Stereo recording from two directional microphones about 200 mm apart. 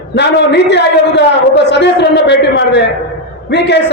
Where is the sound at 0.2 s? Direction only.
60° left (ahead or behind).